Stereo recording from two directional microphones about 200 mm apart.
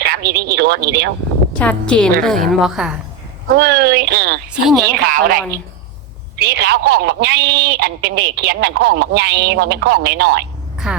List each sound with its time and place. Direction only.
0.0 s speech: 50° right (ahead or behind)
1.5 s a woman's voice: 5° left (ahead or behind)
3.5 s speech: 50° right (ahead or behind)
10.8 s a woman's voice: 5° right (ahead or behind)